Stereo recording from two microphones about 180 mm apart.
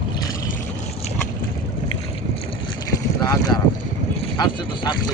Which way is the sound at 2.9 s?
20° left (ahead or behind).